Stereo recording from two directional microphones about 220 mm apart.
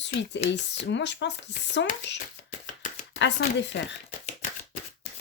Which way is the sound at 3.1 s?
55° left (ahead or behind).